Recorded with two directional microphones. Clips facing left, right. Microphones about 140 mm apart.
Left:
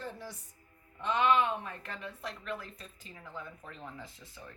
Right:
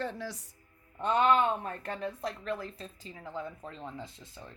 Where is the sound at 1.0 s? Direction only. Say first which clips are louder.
Right 3 dB; 40° right (ahead or behind).